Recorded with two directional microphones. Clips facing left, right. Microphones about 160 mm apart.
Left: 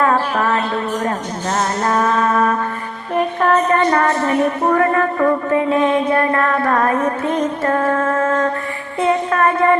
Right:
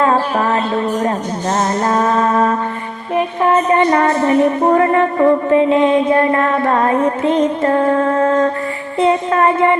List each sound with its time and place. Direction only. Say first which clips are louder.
0.0 s music: right 2 dB; 25° right (ahead or behind)
3.2 s music: right 1 dB; 10° right (ahead or behind); by 8.4 s 35° right (ahead or behind)
9.0 s a sound: right 3 dB; 25° right (ahead or behind)